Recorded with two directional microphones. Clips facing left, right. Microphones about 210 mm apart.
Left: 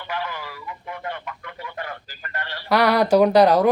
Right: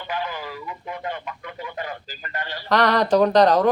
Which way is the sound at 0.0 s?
15° right (ahead or behind).